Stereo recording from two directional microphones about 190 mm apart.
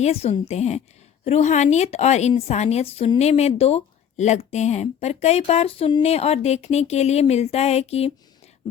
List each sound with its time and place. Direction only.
0.0 s speech: 35° left (ahead or behind)